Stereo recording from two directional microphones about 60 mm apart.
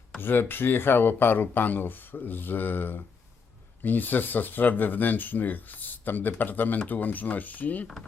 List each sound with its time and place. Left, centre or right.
0.2 s speech: left